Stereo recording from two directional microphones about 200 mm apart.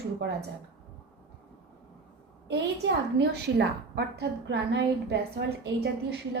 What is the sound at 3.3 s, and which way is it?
A woman's voice, 55° right (ahead or behind).